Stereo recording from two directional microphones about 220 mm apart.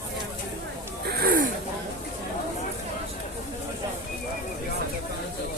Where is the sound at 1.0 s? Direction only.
45° right (ahead or behind).